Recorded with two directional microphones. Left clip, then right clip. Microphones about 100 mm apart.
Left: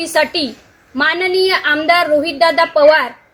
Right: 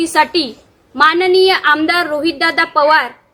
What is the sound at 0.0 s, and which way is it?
A woman's voice, 30° right (ahead or behind).